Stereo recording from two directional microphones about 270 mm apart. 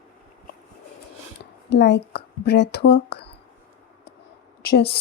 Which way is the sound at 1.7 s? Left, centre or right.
Left.